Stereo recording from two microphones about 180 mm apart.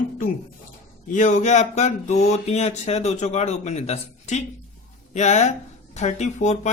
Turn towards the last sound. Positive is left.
turn(degrees=40)  # may be behind; listen again after turning